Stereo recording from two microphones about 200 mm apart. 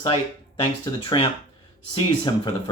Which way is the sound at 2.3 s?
25° left (ahead or behind).